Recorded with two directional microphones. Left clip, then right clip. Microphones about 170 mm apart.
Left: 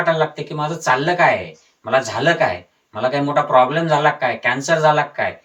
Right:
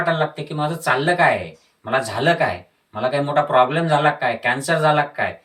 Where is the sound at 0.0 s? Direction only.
20° right (ahead or behind).